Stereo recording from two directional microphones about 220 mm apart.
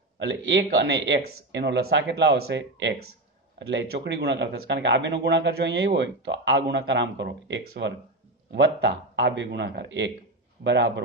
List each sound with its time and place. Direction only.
0.2 s a man's voice: 55° right (ahead or behind)